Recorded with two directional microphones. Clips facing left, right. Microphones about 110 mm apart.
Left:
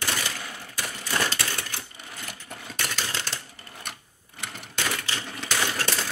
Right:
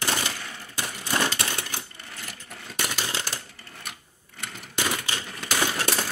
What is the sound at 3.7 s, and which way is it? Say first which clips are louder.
Sewing machine: left 2 dB; centre (ahead or behind).